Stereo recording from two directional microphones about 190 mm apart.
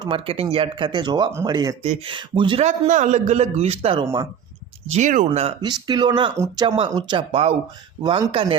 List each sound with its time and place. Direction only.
0.0 s speech: 30° right (ahead or behind)
1.8 s speech: 30° right (ahead or behind)
2.6 s a man's voice: 40° right (ahead or behind)
5.5 s speech: 20° right (ahead or behind)
7.1 s speech: 30° right (ahead or behind)